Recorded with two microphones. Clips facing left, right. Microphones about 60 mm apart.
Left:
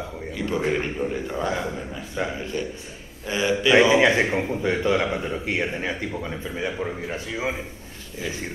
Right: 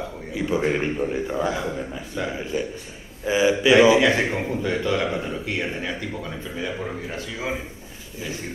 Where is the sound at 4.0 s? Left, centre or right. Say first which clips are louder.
Left 1 dB; left.